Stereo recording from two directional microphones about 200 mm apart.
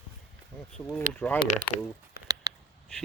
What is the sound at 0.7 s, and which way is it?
Speech, 10° left (ahead or behind).